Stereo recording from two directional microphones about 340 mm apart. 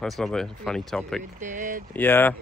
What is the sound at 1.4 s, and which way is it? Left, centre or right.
Speech, right.